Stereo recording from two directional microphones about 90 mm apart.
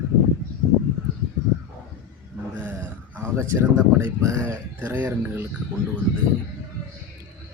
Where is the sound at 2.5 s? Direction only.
20° right (ahead or behind).